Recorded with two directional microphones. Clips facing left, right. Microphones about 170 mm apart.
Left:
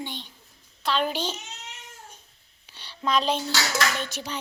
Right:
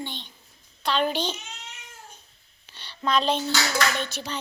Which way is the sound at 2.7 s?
10° left (ahead or behind).